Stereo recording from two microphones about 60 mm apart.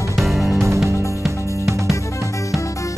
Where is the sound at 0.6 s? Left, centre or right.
Right.